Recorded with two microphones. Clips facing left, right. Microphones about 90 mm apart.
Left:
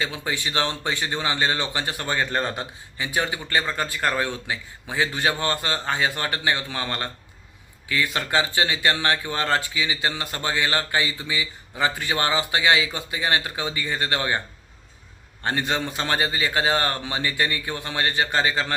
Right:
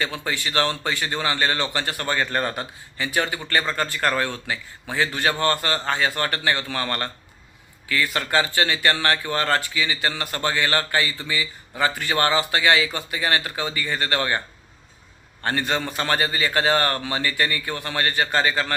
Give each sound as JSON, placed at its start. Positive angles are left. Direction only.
{"t": 0.0, "sound": "speech", "side_deg": 15}
{"t": 15.4, "sound": "a man's voice", "side_deg": 20}